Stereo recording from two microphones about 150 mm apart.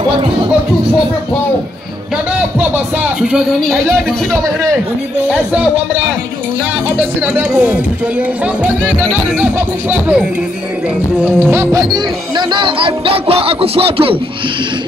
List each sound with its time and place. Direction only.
2.7 s speech: 5° right (ahead or behind)
7.0 s speech: 10° right (ahead or behind)
9.4 s speech: 10° right (ahead or behind)
11.3 s speech: 15° right (ahead or behind)
11.9 s speech: 30° right (ahead or behind)